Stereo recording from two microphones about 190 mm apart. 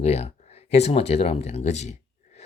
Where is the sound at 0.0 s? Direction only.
35° left (ahead or behind).